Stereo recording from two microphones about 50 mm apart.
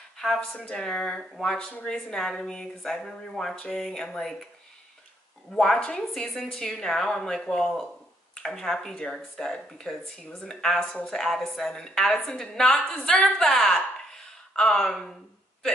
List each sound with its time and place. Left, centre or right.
0.2 s speech: centre
5.5 s speech: centre
13.7 s a sound: centre